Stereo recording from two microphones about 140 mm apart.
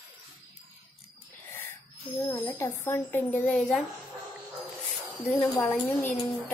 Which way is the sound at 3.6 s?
Centre (ahead or behind).